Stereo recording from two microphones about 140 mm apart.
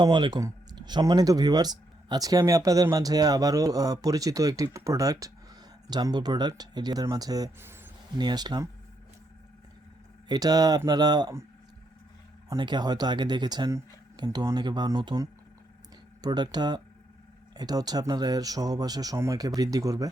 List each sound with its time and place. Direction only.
0.0 s speech: 30° right (ahead or behind)
10.2 s speech: 30° right (ahead or behind)
12.5 s speech: 30° right (ahead or behind)